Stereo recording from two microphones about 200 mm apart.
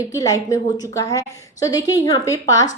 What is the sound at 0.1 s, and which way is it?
A woman's voice, 15° left (ahead or behind).